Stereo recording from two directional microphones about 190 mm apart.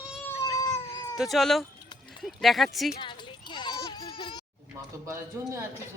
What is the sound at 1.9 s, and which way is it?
Clip-clop, 25° left (ahead or behind).